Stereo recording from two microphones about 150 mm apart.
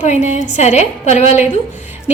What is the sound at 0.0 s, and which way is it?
A woman's voice, 50° left (ahead or behind).